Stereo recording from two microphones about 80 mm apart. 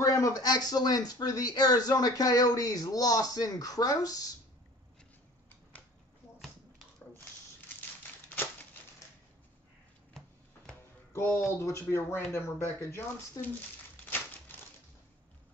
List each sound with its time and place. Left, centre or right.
0.0 s speech: left
11.1 s speech: left